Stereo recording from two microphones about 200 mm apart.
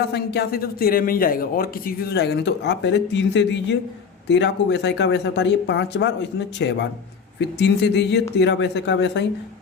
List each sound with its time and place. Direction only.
0.1 s a man's voice: 55° left (ahead or behind)